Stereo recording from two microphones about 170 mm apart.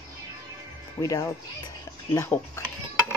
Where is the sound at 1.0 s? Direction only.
20° left (ahead or behind).